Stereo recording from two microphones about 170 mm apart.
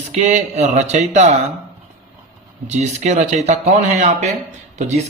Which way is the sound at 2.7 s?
40° right (ahead or behind).